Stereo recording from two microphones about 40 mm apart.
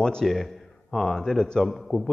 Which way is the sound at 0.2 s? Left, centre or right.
Centre.